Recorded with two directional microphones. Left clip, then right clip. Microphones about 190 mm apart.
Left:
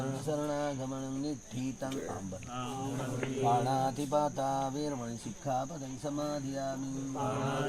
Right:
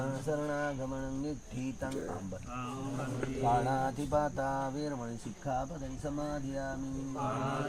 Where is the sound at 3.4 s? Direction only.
5° right (ahead or behind).